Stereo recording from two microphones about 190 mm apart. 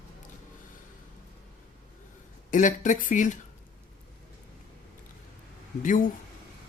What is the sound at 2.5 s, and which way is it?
Speech, 40° left (ahead or behind).